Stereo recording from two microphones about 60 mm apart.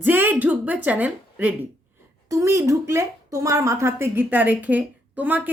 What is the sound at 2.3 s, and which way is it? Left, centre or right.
A woman's voice, right.